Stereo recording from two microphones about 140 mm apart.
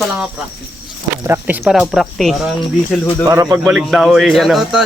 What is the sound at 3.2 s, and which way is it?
Speech, 20° right (ahead or behind).